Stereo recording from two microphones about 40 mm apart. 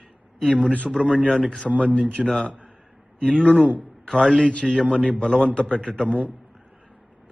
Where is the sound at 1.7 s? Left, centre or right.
Left.